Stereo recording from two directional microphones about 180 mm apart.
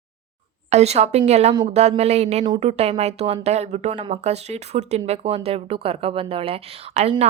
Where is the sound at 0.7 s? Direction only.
35° right (ahead or behind).